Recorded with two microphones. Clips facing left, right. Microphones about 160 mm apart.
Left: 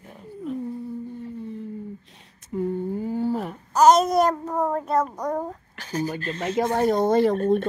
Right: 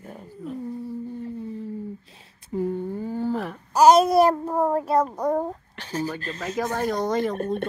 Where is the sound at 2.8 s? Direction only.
15° left (ahead or behind).